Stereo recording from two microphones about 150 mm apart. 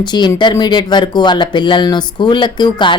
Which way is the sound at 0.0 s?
30° left (ahead or behind).